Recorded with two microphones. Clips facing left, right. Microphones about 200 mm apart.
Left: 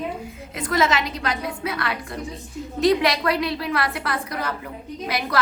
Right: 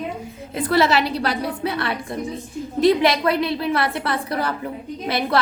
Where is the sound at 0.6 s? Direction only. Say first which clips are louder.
Right 4 dB; 35° right (ahead or behind).